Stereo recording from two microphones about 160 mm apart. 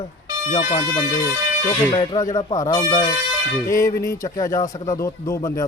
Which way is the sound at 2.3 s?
25° left (ahead or behind).